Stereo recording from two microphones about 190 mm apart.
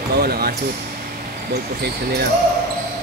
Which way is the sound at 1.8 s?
55° right (ahead or behind).